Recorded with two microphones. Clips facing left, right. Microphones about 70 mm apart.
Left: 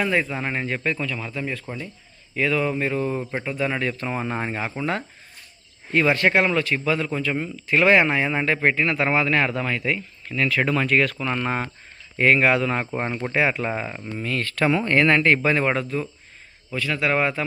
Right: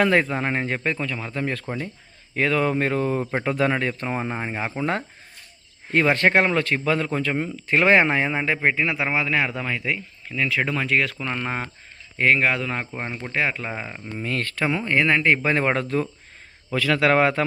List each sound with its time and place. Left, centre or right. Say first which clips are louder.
0.0 s speech: right 4 dB; right
0.3 s speech: right 2 dB; right
3.4 s a man's voice: right 5 dB; right
3.7 s speech: right 1 dB; right
4.3 s speech: left 2 dB; centre
4.5 s speech: even; centre
4.8 s speech: right 1 dB; right
8.3 s speech: left 1 dB; centre
14.3 s speech: even; right
14.5 s speech: left 3 dB; centre
15.4 s speech: even; right
15.8 s speech: right 3 dB; right
16.7 s a man's voice: right 4 dB; right